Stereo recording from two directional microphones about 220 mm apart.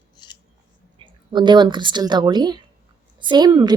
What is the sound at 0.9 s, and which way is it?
A woman's voice, 20° right (ahead or behind).